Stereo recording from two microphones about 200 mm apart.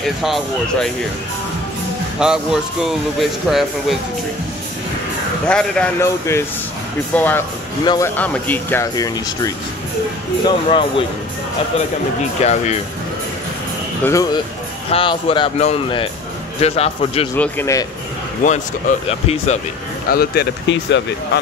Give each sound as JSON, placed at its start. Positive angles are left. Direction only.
{"t": 0.2, "sound": "speech", "side_deg": 0}
{"t": 2.1, "sound": "speech", "side_deg": -5}
{"t": 5.5, "sound": "speech", "side_deg": 5}
{"t": 7.8, "sound": "speech", "side_deg": 20}
{"t": 8.2, "sound": "speech", "side_deg": 10}
{"t": 12.4, "sound": "speech", "side_deg": 35}
{"t": 14.0, "sound": "speech", "side_deg": 15}
{"t": 14.9, "sound": "speech", "side_deg": 25}
{"t": 17.4, "sound": "speech", "side_deg": 10}
{"t": 18.4, "sound": "speech", "side_deg": 40}
{"t": 20.1, "sound": "speech", "side_deg": 50}